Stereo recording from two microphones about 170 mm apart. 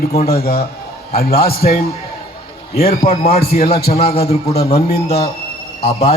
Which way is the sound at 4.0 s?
35° left (ahead or behind).